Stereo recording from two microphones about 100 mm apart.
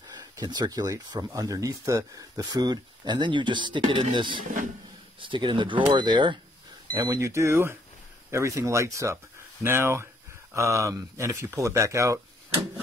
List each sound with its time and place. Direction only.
0.2 s speech: 40° right (ahead or behind)
6.9 s speech: 35° right (ahead or behind)